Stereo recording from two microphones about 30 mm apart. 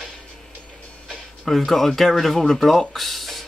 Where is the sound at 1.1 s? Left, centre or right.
Centre.